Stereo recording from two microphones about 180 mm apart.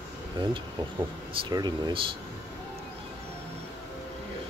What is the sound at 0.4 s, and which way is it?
Speech, 25° right (ahead or behind).